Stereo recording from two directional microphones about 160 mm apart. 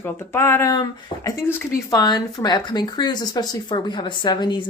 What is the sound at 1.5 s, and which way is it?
Speech, 15° left (ahead or behind).